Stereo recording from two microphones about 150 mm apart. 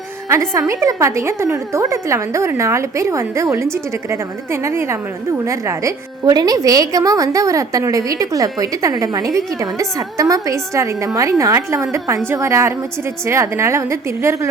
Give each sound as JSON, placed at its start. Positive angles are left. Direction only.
{"t": 0.3, "sound": "a woman's voice", "side_deg": -20}